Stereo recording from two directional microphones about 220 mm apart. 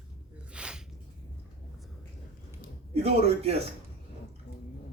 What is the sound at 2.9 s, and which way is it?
Speech, 30° right (ahead or behind).